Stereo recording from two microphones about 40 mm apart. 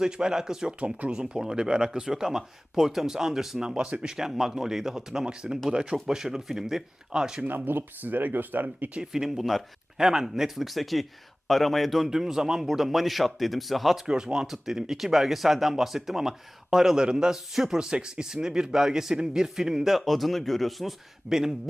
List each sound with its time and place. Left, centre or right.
0.0 s speech: centre
0.9 s speech: right
1.2 s speech: centre
7.4 s speech: right
9.0 s speech: centre
10.0 s speech: centre
12.0 s speech: centre
14.0 s speech: centre
14.4 s speech: centre
21.2 s speech: centre